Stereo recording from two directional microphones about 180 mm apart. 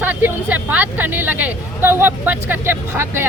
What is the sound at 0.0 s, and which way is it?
Speech, 10° right (ahead or behind).